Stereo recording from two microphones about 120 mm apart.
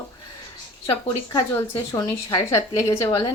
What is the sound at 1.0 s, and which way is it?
A woman's voice, 35° left (ahead or behind).